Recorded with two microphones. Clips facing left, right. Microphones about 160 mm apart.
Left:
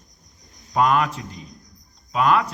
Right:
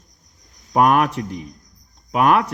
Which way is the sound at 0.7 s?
60° right (ahead or behind).